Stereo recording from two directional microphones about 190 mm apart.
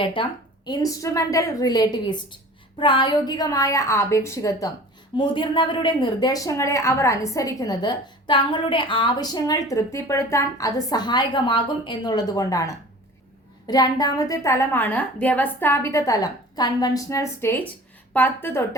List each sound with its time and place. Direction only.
0.0 s a woman's voice: 25° left (ahead or behind); by 18.6 s 10° left (ahead or behind)